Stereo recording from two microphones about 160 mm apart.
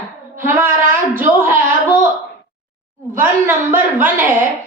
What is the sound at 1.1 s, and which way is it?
Speech, 10° right (ahead or behind).